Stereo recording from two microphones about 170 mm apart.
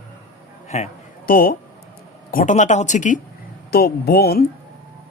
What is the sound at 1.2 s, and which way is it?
Speech, 60° left (ahead or behind).